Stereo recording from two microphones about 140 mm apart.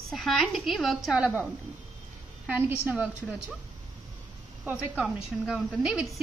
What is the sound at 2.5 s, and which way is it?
Speech, 10° right (ahead or behind).